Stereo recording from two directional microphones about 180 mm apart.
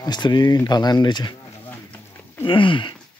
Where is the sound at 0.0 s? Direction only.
25° left (ahead or behind).